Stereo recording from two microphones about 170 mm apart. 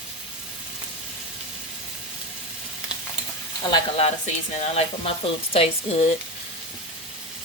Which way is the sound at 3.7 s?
35° left (ahead or behind).